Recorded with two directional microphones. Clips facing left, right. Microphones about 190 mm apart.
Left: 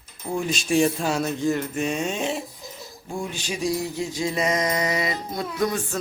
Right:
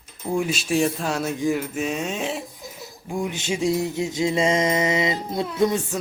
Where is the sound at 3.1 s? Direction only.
15° right (ahead or behind).